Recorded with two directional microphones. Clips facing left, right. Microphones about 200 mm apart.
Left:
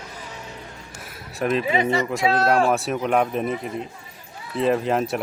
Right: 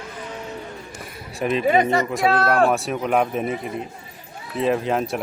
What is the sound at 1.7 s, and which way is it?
Speech, 50° right (ahead or behind).